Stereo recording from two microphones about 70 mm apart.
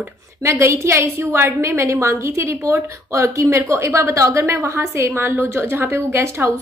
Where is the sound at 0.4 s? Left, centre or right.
Right.